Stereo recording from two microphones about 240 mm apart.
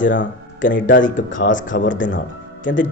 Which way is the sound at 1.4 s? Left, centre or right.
Left.